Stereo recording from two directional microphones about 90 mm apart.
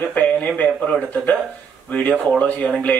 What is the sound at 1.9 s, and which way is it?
Speech, 15° left (ahead or behind).